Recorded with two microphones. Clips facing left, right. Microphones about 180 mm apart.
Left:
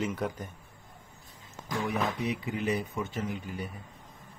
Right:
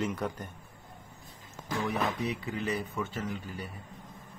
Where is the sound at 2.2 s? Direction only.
15° left (ahead or behind).